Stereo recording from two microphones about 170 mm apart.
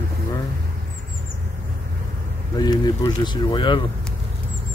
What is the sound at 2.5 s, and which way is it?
Speech, 25° left (ahead or behind).